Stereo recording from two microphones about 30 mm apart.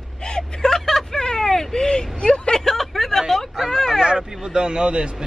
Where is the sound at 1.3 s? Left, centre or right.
Centre.